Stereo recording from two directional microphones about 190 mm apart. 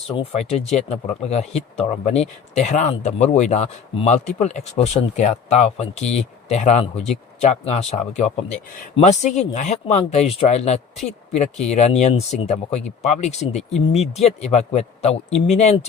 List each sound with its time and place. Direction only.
0.1 s speech: 30° left (ahead or behind)